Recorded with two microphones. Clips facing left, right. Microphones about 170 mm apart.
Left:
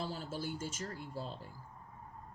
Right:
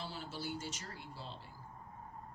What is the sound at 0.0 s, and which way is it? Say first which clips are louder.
Speech: left 4 dB; 45° left (ahead or behind).